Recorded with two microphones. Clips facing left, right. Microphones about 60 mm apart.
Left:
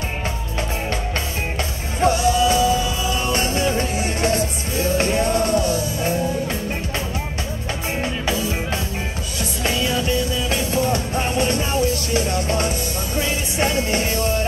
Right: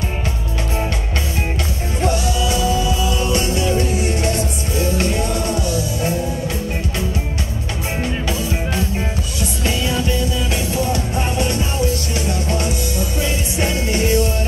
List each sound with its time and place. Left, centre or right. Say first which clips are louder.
2.0 s music: left 4 dB; left
10.5 s music: left 3 dB; left